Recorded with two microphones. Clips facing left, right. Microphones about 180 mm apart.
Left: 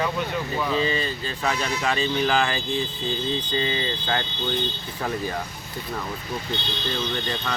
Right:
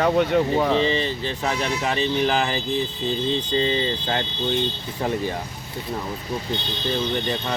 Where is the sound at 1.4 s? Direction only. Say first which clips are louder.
Even; 20° right (ahead or behind).